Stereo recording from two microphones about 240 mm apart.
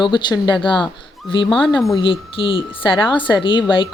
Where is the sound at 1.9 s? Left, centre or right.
Left.